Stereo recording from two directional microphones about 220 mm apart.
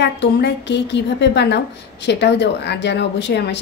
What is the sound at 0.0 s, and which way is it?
A woman's voice, 50° left (ahead or behind).